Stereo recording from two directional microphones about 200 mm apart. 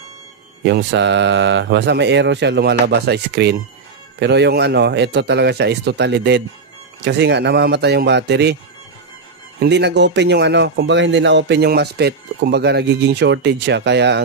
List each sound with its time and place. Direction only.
0.7 s speech: 60° right (ahead or behind)
9.6 s speech: 60° right (ahead or behind)